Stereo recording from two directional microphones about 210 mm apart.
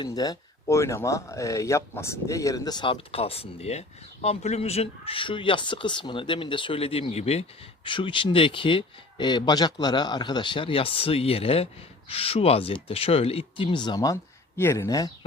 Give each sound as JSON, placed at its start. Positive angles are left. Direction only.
{"t": 0.0, "sound": "speech", "side_deg": 20}